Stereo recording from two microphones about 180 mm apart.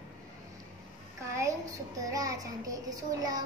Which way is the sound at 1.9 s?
20° right (ahead or behind).